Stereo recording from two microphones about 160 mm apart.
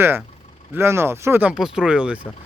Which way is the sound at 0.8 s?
15° right (ahead or behind).